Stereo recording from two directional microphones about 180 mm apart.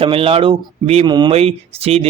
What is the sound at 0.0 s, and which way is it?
Speech, 30° right (ahead or behind).